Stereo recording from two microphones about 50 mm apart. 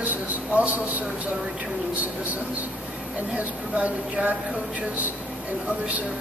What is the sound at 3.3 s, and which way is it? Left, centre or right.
Speech, right.